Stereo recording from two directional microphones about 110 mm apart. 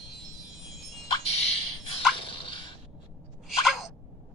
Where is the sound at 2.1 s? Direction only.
50° left (ahead or behind).